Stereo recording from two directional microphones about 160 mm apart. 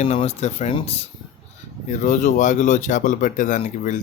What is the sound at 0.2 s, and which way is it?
Speech, 40° left (ahead or behind).